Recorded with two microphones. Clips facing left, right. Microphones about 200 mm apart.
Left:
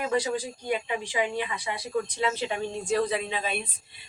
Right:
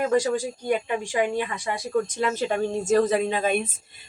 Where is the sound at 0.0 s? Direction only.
45° right (ahead or behind).